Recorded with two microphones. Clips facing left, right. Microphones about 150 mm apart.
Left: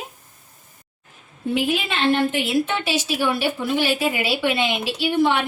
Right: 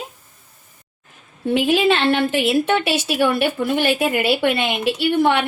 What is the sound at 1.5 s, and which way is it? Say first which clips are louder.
Speech: right 7 dB; 85° right.